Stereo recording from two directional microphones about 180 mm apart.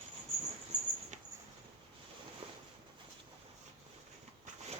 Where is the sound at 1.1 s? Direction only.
40° right (ahead or behind).